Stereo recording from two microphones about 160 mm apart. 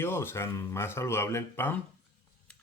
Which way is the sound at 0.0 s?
15° left (ahead or behind).